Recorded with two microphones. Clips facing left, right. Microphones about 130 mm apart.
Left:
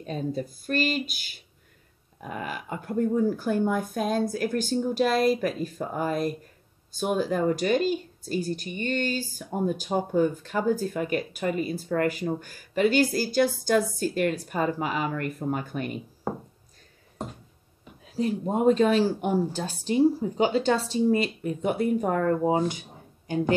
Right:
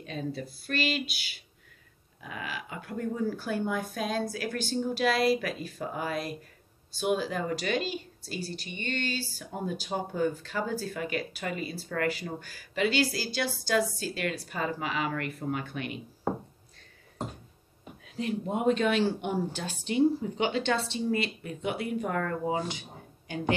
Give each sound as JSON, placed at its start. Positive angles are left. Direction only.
{"t": 0.0, "sound": "a woman's voice", "side_deg": 40}
{"t": 18.1, "sound": "speech", "side_deg": 40}